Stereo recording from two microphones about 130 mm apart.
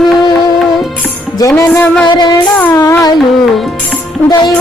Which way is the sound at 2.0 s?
35° left (ahead or behind).